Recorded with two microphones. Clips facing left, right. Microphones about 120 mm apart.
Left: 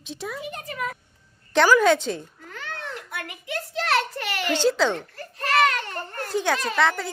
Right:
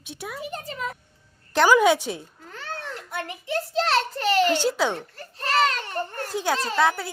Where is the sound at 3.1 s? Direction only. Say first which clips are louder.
Right 6 dB; 30° right (ahead or behind).